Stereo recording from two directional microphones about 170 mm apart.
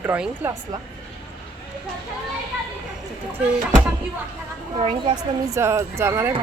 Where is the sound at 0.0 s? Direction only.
10° right (ahead or behind).